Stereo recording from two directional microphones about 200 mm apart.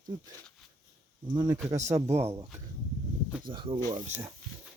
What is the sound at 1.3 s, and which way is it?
Speech, 20° right (ahead or behind).